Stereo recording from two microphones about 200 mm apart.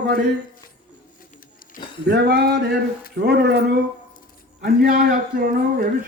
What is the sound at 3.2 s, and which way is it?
A man's voice, 55° right (ahead or behind).